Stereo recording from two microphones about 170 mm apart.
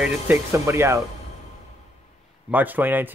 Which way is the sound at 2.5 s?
10° right (ahead or behind).